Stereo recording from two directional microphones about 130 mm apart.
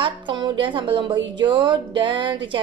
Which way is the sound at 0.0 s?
40° right (ahead or behind).